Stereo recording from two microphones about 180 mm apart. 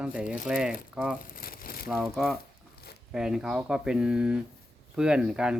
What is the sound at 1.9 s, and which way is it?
Speech, 5° right (ahead or behind).